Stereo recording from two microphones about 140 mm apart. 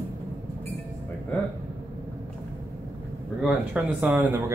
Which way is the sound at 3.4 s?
5° right (ahead or behind).